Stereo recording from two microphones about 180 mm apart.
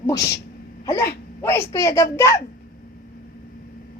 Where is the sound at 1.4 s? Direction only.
15° left (ahead or behind).